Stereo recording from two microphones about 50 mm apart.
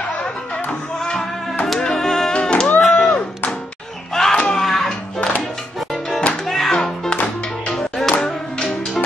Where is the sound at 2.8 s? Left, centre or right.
Centre.